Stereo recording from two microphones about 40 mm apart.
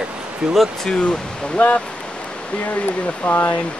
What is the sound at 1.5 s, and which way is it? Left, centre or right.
Speech, left.